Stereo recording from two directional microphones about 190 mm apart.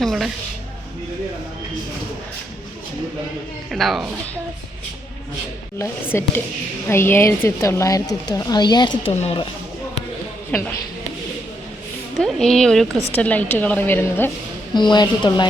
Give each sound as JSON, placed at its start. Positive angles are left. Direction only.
{"t": 0.0, "sound": "speech", "side_deg": 0}
{"t": 3.7, "sound": "speech", "side_deg": 0}
{"t": 5.8, "sound": "speech", "side_deg": 15}
{"t": 10.5, "sound": "speech", "side_deg": 5}
{"t": 12.2, "sound": "speech", "side_deg": 0}
{"t": 14.8, "sound": "a woman's voice", "side_deg": 25}